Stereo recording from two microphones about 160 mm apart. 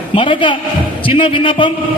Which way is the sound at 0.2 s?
30° left (ahead or behind).